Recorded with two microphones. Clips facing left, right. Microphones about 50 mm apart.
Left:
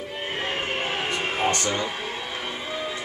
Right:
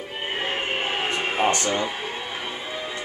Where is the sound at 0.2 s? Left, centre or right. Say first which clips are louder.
Right 2 dB; centre.